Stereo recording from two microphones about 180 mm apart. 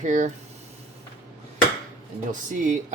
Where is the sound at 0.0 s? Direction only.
45° right (ahead or behind).